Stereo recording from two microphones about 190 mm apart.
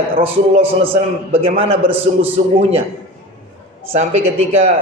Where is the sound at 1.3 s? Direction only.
30° right (ahead or behind).